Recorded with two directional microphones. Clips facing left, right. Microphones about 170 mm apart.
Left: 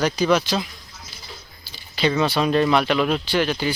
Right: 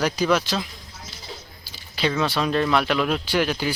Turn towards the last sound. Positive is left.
turn(degrees=-5)  # may be behind; listen again after turning